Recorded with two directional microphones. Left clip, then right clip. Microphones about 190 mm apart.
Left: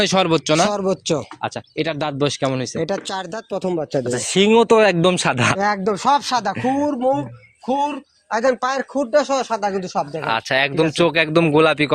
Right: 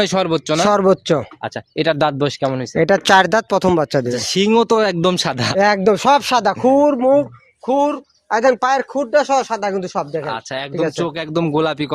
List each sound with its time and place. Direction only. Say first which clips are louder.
0.0 s a man's voice: even; 10° right (ahead or behind)
0.3 s a man's voice: left 1 dB; centre (ahead or behind)
0.6 s speech: right 5 dB; 45° right (ahead or behind)
2.4 s a man's voice: right 2 dB; 15° right (ahead or behind)
2.7 s speech: right 12 dB; 50° right (ahead or behind)
4.1 s speech: left 4 dB; 25° right (ahead or behind)
5.5 s speech: right 6 dB; 55° right (ahead or behind)
10.2 s speech: left 6 dB; 25° left (ahead or behind)
11.3 s a man's voice: left 1 dB; 10° right (ahead or behind)